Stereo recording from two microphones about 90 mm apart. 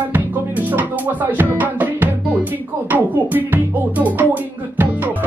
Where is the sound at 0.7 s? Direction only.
20° right (ahead or behind).